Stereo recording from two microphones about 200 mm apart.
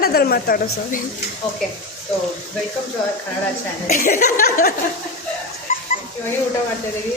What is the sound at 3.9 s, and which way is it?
Speech, 40° left (ahead or behind).